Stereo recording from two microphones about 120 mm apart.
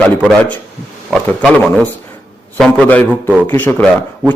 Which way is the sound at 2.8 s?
15° left (ahead or behind).